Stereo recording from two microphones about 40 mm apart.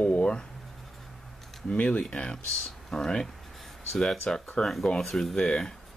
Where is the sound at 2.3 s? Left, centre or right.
Centre.